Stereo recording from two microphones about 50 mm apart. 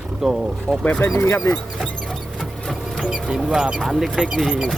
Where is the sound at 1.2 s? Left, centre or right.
Left.